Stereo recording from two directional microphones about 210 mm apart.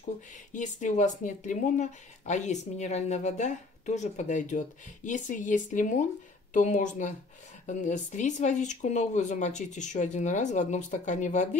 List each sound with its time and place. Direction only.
0.5 s speech: 35° left (ahead or behind)